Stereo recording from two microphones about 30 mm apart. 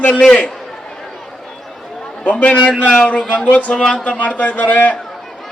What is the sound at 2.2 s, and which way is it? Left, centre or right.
A man's voice, left.